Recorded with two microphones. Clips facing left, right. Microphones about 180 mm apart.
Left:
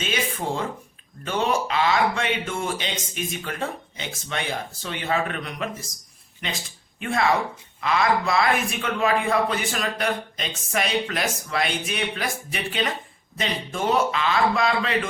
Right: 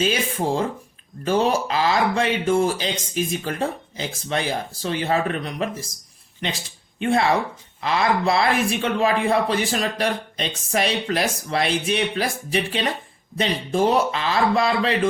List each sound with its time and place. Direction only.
0.0 s speech: 35° right (ahead or behind)
7.0 s speech: 30° right (ahead or behind)